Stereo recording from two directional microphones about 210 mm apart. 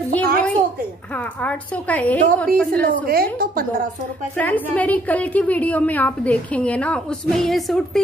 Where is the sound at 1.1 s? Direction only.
5° left (ahead or behind).